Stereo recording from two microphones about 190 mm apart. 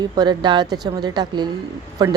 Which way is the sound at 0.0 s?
20° right (ahead or behind).